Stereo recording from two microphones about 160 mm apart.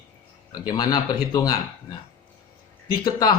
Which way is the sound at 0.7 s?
25° left (ahead or behind).